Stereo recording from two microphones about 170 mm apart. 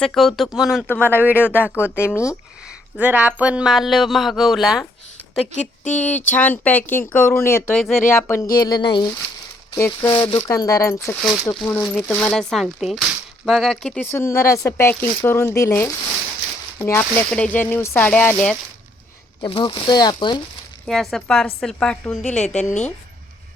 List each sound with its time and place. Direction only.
0.0 s speech: centre (ahead or behind)
0.9 s speech: 10° left (ahead or behind)
1.4 s speech: 10° right (ahead or behind)
1.7 s speech: 15° left (ahead or behind)
3.0 s speech: 10° right (ahead or behind)
5.9 s speech: 10° left (ahead or behind); by 9.0 s 30° left (ahead or behind)
9.7 s speech: 15° left (ahead or behind)
10.1 s speech: 30° left (ahead or behind)
10.5 s speech: 20° left (ahead or behind)
11.2 s speech: centre (ahead or behind)
19.4 s speech: 30° left (ahead or behind)
20.8 s speech: centre (ahead or behind)